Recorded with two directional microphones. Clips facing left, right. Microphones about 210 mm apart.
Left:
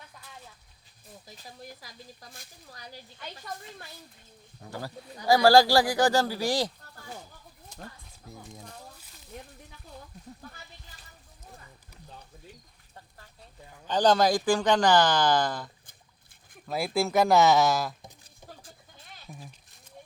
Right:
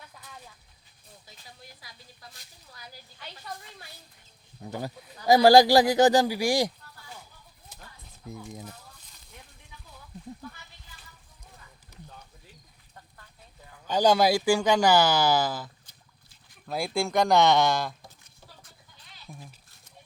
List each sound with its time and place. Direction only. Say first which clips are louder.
1.8 s speech: left 3 dB; 45° left (ahead or behind)
2.7 s speech: left 3 dB; 35° left (ahead or behind)
4.6 s speech: right 3 dB; 20° right (ahead or behind)
13.8 s speech: right 1 dB; 10° right (ahead or behind)
18.9 s sheep: left 4 dB; 50° left (ahead or behind)